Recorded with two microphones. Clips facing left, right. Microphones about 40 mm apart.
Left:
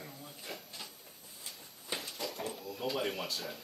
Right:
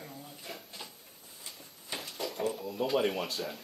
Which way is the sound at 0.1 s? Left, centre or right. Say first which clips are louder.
Right 1 dB; centre.